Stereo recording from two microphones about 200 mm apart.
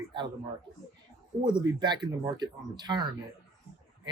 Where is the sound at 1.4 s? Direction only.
20° right (ahead or behind).